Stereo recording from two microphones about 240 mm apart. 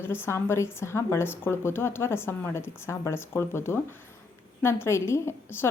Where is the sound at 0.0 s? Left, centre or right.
Centre.